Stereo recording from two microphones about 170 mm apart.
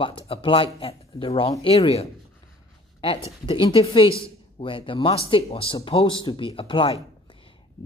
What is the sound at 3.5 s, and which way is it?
Speech, 30° left (ahead or behind).